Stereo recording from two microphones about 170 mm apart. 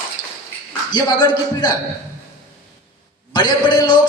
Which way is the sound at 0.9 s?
25° left (ahead or behind).